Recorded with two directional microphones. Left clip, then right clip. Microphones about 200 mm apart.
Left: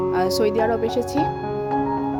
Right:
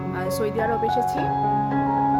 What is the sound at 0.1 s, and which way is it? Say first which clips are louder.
Speech: left 3 dB; 35° left (ahead or behind).